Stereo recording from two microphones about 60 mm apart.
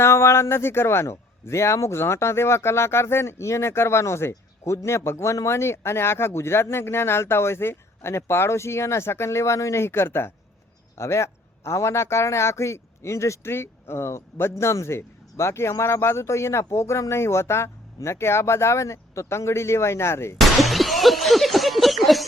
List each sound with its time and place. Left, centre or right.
0.0 s a man's voice: left
20.4 s breaking: centre